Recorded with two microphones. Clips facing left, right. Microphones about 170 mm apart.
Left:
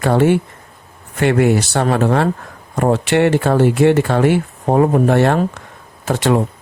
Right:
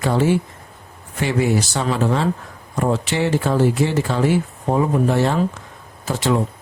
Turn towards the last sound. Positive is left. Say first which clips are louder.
# left 4 dB
turn(degrees=65)  # may be behind; listen again after turning